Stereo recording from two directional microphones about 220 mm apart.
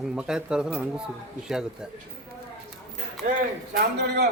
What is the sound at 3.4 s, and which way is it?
Speech, 45° right (ahead or behind).